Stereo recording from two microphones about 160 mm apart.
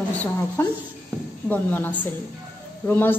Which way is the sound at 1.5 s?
10° left (ahead or behind).